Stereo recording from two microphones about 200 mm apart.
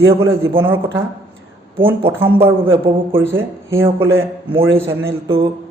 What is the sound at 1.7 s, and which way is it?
A man's voice, 25° right (ahead or behind).